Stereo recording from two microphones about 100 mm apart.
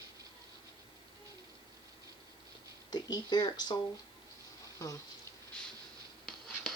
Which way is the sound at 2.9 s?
45° left (ahead or behind).